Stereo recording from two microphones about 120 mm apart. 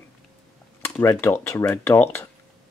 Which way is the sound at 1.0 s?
20° left (ahead or behind).